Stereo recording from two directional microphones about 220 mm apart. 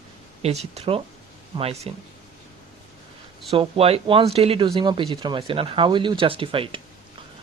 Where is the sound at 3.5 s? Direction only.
25° right (ahead or behind).